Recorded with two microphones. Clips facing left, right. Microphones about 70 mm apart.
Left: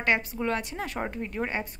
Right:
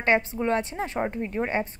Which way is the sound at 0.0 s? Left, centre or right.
Right.